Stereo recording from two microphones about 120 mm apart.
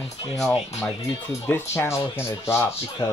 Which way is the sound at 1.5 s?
20° left (ahead or behind).